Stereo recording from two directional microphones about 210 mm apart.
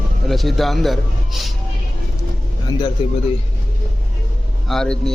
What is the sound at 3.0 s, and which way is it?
Speech, 25° left (ahead or behind).